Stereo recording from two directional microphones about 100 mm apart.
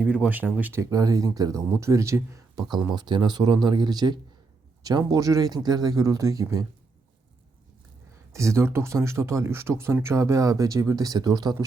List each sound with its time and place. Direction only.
0.0 s speech: 10° right (ahead or behind)
0.9 s speech: 35° right (ahead or behind)
2.9 s speech: 45° right (ahead or behind)
8.3 s speech: 30° right (ahead or behind)